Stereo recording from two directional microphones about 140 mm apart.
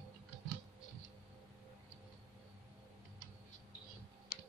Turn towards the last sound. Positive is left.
turn(degrees=90)